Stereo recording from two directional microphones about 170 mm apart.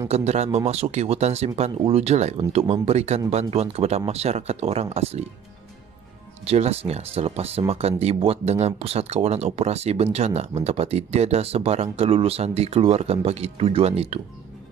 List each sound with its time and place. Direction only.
0.1 s speech: 40° right (ahead or behind)
6.4 s speech: 40° right (ahead or behind)